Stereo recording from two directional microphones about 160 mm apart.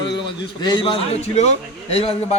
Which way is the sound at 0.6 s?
30° left (ahead or behind).